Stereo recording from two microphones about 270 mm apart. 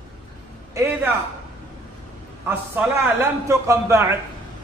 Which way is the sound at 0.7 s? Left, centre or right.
Centre.